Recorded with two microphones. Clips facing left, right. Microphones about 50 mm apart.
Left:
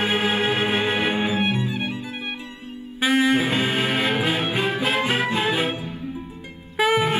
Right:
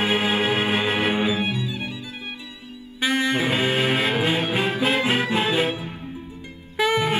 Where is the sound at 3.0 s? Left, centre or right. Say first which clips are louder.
Left 3 dB; centre.